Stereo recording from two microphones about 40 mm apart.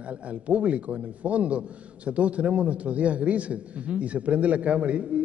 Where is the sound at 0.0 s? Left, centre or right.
Right.